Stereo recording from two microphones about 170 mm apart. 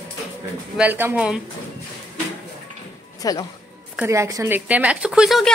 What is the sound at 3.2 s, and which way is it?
Speech, 20° left (ahead or behind).